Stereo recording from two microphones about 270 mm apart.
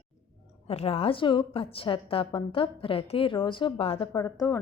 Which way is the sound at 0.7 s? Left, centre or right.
Left.